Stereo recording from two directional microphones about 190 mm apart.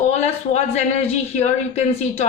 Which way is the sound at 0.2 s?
35° left (ahead or behind).